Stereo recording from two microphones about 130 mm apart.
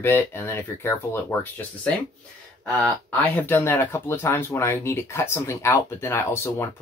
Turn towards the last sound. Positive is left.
turn(degrees=20)  # may be behind; listen again after turning